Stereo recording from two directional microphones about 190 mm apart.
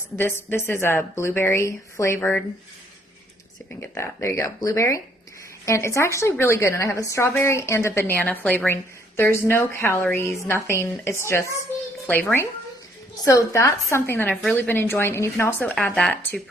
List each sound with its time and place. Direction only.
0.2 s a woman's voice: 10° left (ahead or behind)
3.7 s a woman's voice: 15° left (ahead or behind)